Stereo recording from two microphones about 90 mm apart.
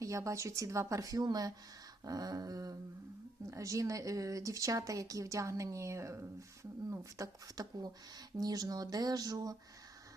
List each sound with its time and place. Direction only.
0.0 s speech: 35° right (ahead or behind)